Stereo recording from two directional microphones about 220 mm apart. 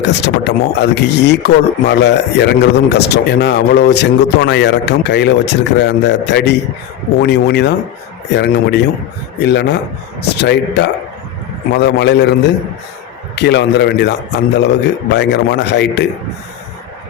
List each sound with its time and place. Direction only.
0.0 s speech: 50° left (ahead or behind)